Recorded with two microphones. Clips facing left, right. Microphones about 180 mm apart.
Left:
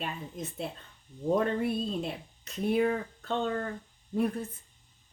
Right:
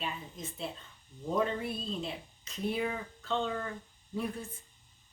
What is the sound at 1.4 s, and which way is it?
Speech, 50° left (ahead or behind).